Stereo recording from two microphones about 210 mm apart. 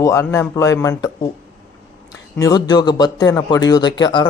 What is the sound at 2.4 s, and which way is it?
Speech, 20° left (ahead or behind).